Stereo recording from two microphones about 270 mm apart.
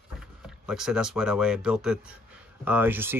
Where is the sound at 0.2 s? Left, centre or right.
Centre.